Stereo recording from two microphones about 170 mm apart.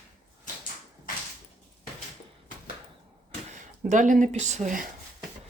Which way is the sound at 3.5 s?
45° right (ahead or behind).